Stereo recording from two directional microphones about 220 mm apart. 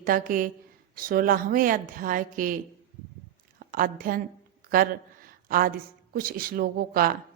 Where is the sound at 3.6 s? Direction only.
40° right (ahead or behind).